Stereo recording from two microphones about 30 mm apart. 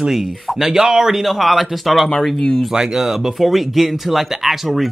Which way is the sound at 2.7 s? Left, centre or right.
Centre.